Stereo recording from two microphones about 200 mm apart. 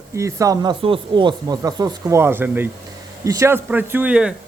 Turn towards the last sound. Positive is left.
turn(degrees=-5)  # may be behind; listen again after turning